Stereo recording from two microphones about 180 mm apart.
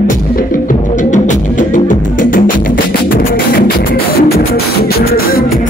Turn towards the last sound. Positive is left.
turn(degrees=55)  # may be behind; listen again after turning